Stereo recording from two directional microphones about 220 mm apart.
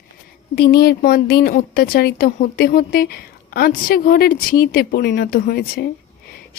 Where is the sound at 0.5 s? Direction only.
45° left (ahead or behind).